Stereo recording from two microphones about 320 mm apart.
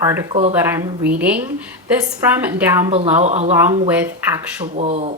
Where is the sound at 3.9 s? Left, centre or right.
Centre.